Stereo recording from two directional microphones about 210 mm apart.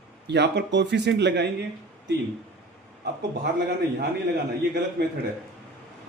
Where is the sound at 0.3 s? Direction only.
55° right (ahead or behind).